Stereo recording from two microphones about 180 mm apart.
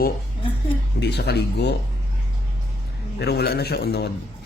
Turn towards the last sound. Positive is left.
turn(degrees=65)  # may be behind; listen again after turning